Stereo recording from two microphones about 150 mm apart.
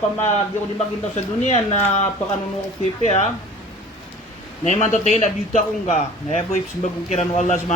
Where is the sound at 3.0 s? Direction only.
55° left (ahead or behind).